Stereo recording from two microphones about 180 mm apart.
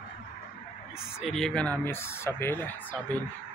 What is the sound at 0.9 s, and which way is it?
Speech, centre (ahead or behind).